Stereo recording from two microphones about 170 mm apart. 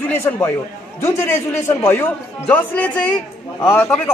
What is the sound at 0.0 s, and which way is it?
A man's voice, 10° left (ahead or behind).